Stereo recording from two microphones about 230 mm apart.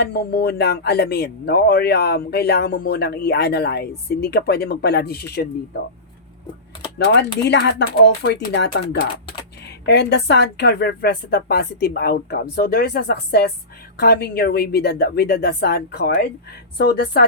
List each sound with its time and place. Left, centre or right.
0.0 s speech: left
7.0 s speech: left